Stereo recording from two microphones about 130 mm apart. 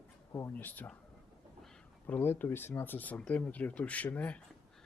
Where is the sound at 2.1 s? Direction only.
15° left (ahead or behind).